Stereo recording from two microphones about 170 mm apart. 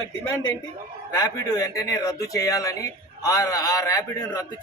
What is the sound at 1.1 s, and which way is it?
Speech, 20° left (ahead or behind).